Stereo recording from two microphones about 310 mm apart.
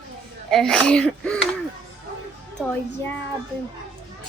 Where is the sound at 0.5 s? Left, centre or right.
Centre.